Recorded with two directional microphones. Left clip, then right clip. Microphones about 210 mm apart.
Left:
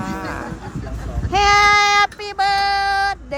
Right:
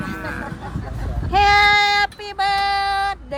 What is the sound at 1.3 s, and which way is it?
Child singing, 10° left (ahead or behind).